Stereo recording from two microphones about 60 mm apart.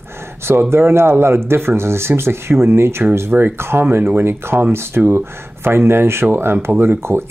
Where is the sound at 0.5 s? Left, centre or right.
Right.